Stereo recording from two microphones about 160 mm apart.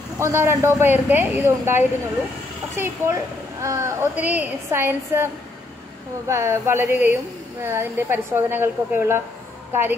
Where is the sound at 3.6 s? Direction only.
20° right (ahead or behind).